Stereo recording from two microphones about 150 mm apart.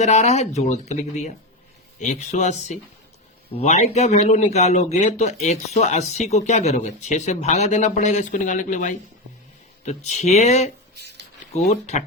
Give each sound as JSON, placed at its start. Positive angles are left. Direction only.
{"t": 0.0, "sound": "a man's voice", "side_deg": 50}